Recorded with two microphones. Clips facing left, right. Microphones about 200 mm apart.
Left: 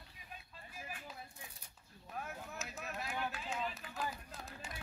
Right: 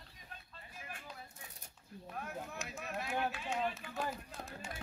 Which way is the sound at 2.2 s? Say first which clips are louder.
Right 3 dB; centre (ahead or behind).